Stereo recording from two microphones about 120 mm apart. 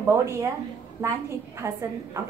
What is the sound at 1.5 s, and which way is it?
Speech, 25° right (ahead or behind).